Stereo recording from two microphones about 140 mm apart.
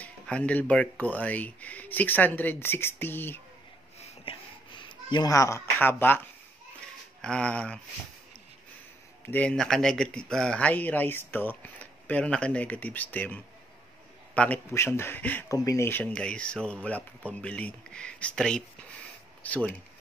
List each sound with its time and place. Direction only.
0.0 s speech: 10° left (ahead or behind)
4.2 s a sound: 35° left (ahead or behind)
5.3 s speech: 20° left (ahead or behind)
9.2 s speech: 10° left (ahead or behind)
15.5 s speech: 25° left (ahead or behind)